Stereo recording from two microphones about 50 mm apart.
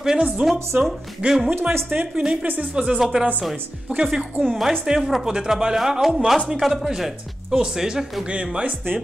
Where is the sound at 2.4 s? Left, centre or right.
Right.